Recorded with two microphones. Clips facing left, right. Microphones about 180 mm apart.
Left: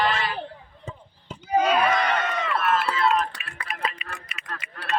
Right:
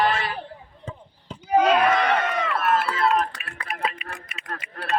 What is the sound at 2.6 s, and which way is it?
Run, 55° right (ahead or behind).